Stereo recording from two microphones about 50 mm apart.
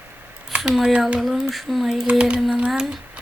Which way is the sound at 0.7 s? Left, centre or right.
Centre.